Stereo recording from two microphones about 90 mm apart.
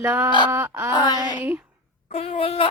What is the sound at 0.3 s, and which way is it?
Speech, 60° left (ahead or behind).